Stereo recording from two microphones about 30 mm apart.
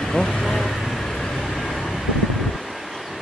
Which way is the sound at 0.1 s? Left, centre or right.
Centre.